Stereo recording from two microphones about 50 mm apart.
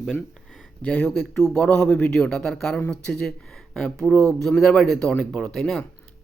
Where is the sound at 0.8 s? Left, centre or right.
Left.